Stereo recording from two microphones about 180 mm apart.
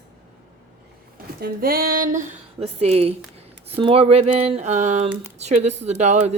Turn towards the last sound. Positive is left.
turn(degrees=-40)  # may be behind; listen again after turning